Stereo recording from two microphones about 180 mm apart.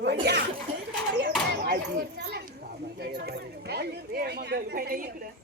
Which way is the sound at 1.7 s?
60° right (ahead or behind).